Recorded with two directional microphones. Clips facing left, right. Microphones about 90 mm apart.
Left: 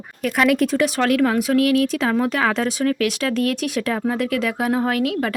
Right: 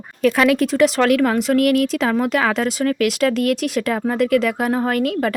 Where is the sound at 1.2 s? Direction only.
55° right (ahead or behind).